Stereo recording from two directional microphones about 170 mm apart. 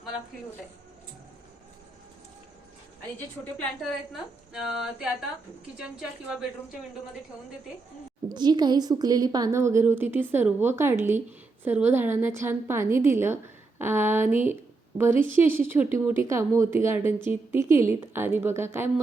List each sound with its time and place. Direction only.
3.6 s a woman's voice: centre (ahead or behind)
8.3 s a woman's voice: 25° right (ahead or behind)